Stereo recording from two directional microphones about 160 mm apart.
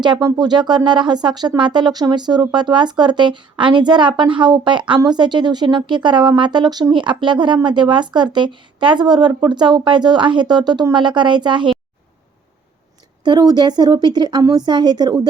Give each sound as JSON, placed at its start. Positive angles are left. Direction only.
{"t": 0.0, "sound": "speech", "side_deg": -25}
{"t": 13.2, "sound": "speech", "side_deg": -25}